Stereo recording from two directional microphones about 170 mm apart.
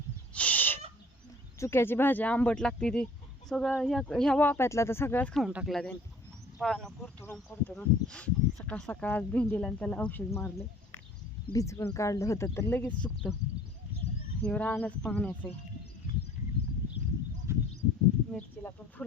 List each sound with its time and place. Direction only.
0.3 s a sound: 10° left (ahead or behind)
1.5 s speech: 15° left (ahead or behind)
11.5 s speech: 15° left (ahead or behind)
14.4 s speech: 5° left (ahead or behind)
17.5 s a sound: 15° right (ahead or behind)
18.3 s speech: 10° left (ahead or behind)